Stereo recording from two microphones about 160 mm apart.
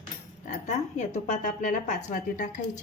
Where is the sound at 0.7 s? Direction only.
45° left (ahead or behind).